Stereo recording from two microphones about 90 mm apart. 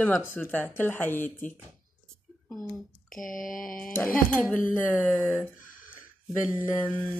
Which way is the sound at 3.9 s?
15° left (ahead or behind).